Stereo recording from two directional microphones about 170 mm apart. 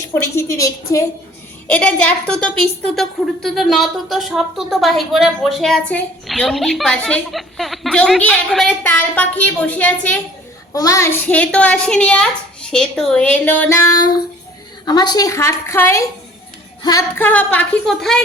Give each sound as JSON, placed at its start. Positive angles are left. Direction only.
{"t": 0.0, "sound": "a woman's voice", "side_deg": 15}
{"t": 1.6, "sound": "a woman's voice", "side_deg": 10}
{"t": 17.2, "sound": "a woman's voice", "side_deg": 10}